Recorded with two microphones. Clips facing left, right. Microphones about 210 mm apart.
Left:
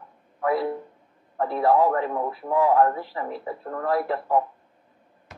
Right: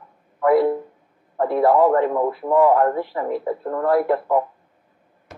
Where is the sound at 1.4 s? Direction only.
50° right (ahead or behind).